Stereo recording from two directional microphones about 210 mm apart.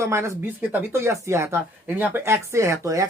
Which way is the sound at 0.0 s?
15° right (ahead or behind).